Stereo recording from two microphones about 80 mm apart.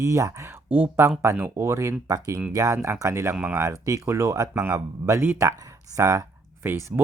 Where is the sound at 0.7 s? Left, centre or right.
Right.